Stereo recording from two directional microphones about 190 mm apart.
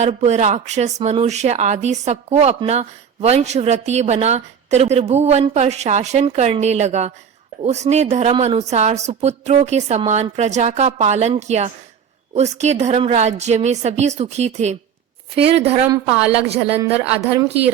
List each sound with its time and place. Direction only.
0.0 s speech: 35° right (ahead or behind)
16.8 s speech: 15° right (ahead or behind)